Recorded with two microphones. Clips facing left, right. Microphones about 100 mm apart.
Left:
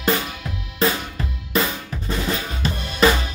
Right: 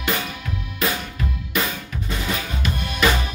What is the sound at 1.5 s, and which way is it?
Drum kit, 30° left (ahead or behind).